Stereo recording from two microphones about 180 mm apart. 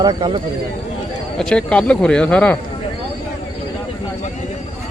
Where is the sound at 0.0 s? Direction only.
25° right (ahead or behind).